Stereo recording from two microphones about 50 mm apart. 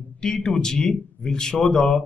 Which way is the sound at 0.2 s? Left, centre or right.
Centre.